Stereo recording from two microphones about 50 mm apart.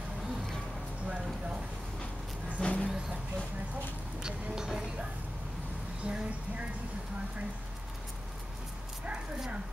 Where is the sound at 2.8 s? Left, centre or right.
Centre.